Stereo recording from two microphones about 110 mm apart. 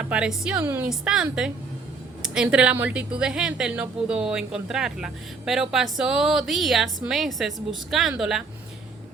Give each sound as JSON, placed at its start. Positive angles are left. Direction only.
{"t": 0.0, "sound": "speech", "side_deg": -10}
{"t": 0.6, "sound": "a woman's voice", "side_deg": -20}
{"t": 0.9, "sound": "a woman's voice", "side_deg": -5}